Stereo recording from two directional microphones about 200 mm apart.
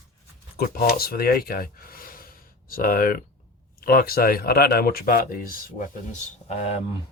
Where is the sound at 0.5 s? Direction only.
50° left (ahead or behind).